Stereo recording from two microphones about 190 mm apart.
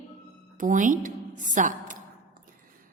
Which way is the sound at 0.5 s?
45° right (ahead or behind).